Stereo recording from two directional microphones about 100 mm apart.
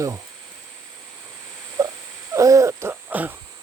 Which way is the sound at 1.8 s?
35° right (ahead or behind).